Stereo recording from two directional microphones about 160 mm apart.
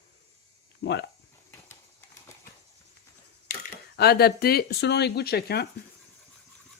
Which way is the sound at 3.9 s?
85° left.